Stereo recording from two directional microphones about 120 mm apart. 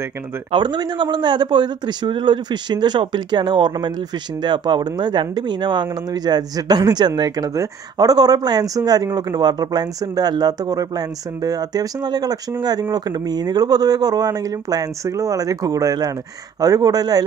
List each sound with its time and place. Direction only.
0.5 s speech: 40° right (ahead or behind)